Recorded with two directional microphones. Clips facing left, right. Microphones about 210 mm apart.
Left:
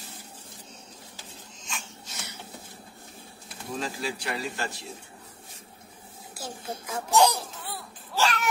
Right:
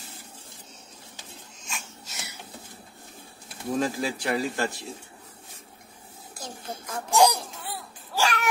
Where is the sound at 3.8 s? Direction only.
45° right (ahead or behind).